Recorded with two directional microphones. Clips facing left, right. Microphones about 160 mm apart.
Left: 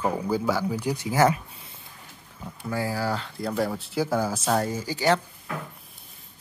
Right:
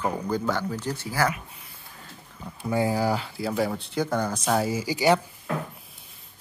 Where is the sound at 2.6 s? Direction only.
20° right (ahead or behind).